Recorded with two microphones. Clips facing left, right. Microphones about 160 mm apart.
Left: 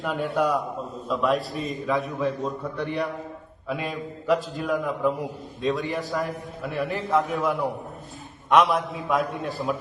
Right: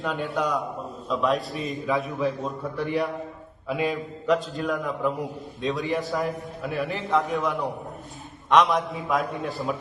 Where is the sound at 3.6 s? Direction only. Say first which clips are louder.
Right 3 dB; centre (ahead or behind).